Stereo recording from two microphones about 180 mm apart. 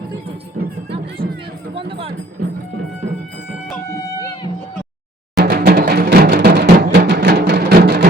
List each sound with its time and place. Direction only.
0.6 s music: 55° right (ahead or behind)
1.9 s music: 30° right (ahead or behind)
5.4 s music: 60° right (ahead or behind)